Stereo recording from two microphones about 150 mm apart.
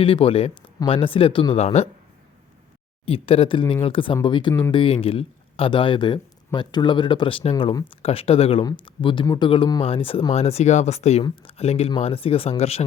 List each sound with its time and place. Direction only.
0.0 s speech: 40° left (ahead or behind)
3.1 s speech: 40° left (ahead or behind)